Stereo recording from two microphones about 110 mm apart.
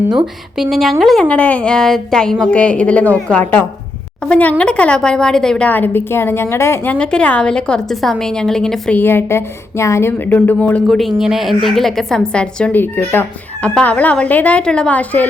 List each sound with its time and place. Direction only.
0.5 s a woman's voice: centre (ahead or behind)
9.0 s a woman's voice: 20° left (ahead or behind)
10.8 s a woman's voice: centre (ahead or behind)